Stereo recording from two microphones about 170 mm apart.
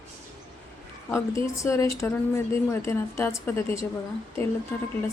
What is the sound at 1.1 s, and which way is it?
A woman's voice, 15° left (ahead or behind).